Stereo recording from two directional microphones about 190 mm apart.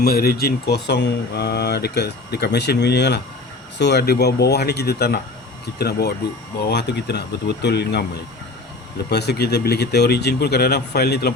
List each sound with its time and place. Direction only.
0.0 s speech: 55° left (ahead or behind)
9.0 s speech: 60° left (ahead or behind)